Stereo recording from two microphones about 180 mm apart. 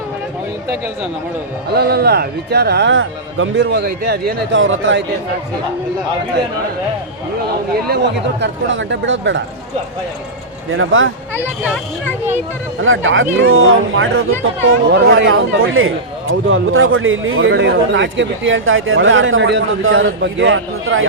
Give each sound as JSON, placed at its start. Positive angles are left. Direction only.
{"t": 1.7, "sound": "speech", "side_deg": -65}
{"t": 7.9, "sound": "speech", "side_deg": -70}
{"t": 10.7, "sound": "speech", "side_deg": -90}
{"t": 11.3, "sound": "speech", "side_deg": -10}
{"t": 12.8, "sound": "speech", "side_deg": -90}